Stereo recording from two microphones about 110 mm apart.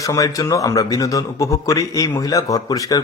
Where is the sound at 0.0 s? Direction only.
30° left (ahead or behind).